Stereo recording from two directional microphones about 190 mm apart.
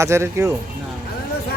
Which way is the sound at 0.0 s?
15° right (ahead or behind).